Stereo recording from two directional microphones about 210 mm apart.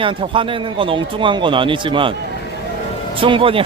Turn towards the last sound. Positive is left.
turn(degrees=-25)  # may be behind; listen again after turning